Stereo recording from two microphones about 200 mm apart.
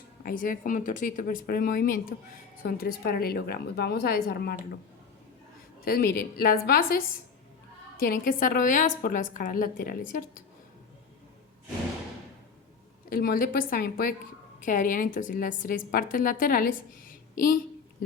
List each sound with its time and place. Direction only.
0.2 s a woman's voice: 45° left (ahead or behind)
5.8 s a woman's voice: 50° left (ahead or behind)
13.1 s a woman's voice: 45° left (ahead or behind)